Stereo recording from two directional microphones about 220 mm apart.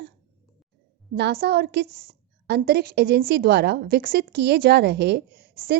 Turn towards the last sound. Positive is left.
turn(degrees=-45)  # may be behind; listen again after turning